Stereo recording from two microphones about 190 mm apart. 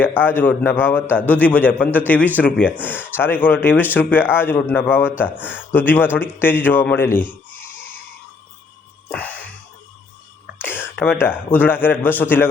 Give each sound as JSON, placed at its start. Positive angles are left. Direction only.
{"t": 0.0, "sound": "a man's voice", "side_deg": 10}
{"t": 9.0, "sound": "sigh", "side_deg": 10}
{"t": 11.0, "sound": "a man's voice", "side_deg": 10}